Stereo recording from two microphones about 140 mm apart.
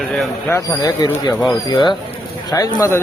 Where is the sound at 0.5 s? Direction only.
25° left (ahead or behind).